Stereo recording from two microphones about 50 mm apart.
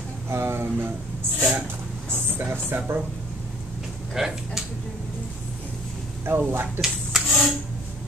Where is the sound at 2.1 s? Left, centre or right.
Right.